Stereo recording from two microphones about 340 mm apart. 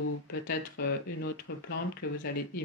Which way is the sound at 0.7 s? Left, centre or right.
Left.